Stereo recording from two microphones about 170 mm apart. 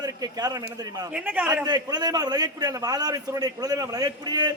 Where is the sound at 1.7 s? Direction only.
25° right (ahead or behind).